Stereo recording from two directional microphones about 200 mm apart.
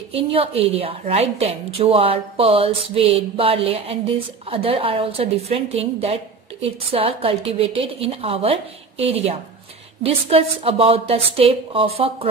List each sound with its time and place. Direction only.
0.1 s a woman's voice: 30° right (ahead or behind)